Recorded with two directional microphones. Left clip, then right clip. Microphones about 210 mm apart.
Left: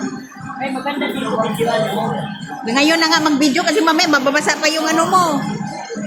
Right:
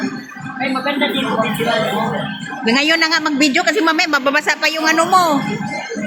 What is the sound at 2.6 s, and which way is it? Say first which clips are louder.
A woman's voice: even; 30° right (ahead or behind).